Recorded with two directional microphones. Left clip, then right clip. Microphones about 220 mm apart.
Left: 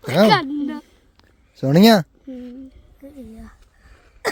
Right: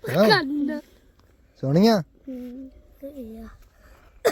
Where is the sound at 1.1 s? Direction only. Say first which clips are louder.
Left 6 dB; 40° left (ahead or behind).